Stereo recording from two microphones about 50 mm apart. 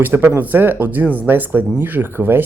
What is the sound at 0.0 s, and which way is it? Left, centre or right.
Speech, right.